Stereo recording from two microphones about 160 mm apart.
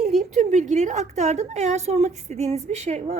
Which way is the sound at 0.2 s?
50° right (ahead or behind).